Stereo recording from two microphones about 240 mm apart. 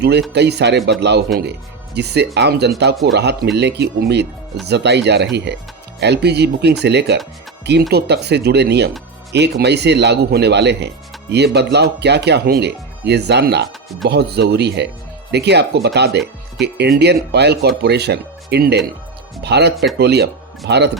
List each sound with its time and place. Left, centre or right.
0.0 s speech: right
19.7 s speech: centre
20.0 s speech: right